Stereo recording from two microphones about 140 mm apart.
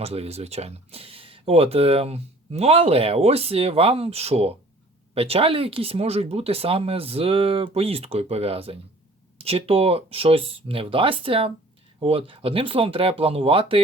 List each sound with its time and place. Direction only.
0.0 s speech: 45° right (ahead or behind)